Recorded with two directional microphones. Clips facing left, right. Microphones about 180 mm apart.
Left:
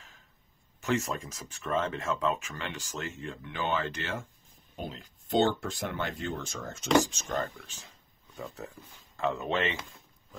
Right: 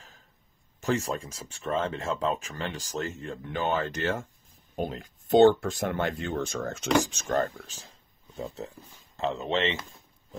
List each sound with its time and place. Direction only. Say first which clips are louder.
0.7 s speech: right 2 dB; 35° right (ahead or behind); by 6.9 s 65° right (ahead or behind)
7.2 s speech: right 6 dB; 45° right (ahead or behind)
8.4 s speech: right 4 dB; 25° right (ahead or behind)